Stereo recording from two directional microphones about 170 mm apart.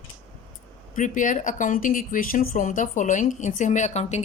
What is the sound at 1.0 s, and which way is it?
Speech, 50° left (ahead or behind).